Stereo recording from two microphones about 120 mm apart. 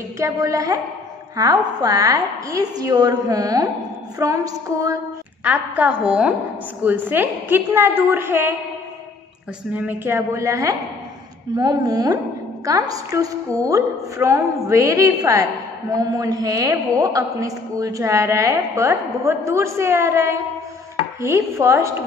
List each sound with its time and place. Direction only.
0.2 s a woman's voice: 25° right (ahead or behind)
5.4 s a woman's voice: 10° right (ahead or behind)
9.8 s a woman's voice: 15° right (ahead or behind)